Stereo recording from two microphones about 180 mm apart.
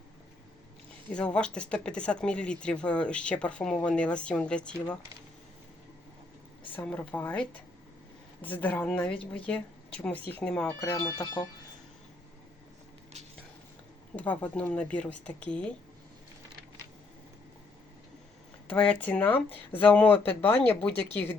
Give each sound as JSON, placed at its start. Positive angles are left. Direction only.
{"t": 1.1, "sound": "speech", "side_deg": 5}
{"t": 6.7, "sound": "speech", "side_deg": 5}
{"t": 10.8, "sound": "speech", "side_deg": 20}
{"t": 14.2, "sound": "speech", "side_deg": 10}
{"t": 18.7, "sound": "speech", "side_deg": 5}